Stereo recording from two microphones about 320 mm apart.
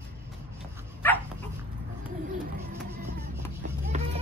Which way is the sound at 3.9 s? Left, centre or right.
Right.